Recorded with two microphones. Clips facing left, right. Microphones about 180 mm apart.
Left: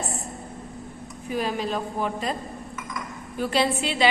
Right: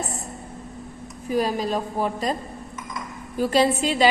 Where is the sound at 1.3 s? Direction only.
40° right (ahead or behind).